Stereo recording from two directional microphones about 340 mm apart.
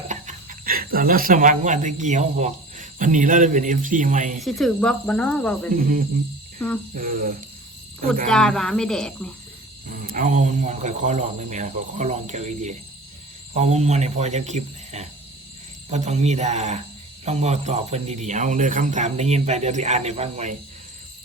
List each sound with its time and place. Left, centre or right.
0.1 s speech: right
4.4 s speech: centre
5.7 s speech: right
8.3 s speech: centre
9.8 s speech: right